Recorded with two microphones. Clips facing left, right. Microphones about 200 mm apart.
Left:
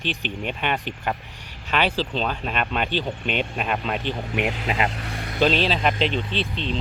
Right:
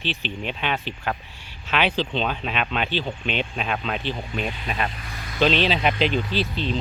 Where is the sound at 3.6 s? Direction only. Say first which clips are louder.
Left 1 dB; 5° left (ahead or behind).